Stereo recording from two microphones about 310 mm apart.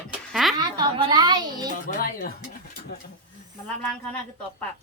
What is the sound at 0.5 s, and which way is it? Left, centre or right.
A child's voice, centre.